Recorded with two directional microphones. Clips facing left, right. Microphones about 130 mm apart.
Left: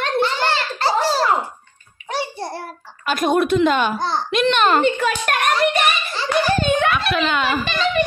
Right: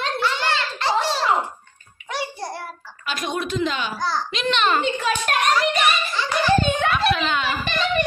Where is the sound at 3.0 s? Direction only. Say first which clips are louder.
Left 9 dB; 50° left (ahead or behind).